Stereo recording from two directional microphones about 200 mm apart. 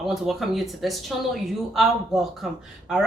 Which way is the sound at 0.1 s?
Centre (ahead or behind).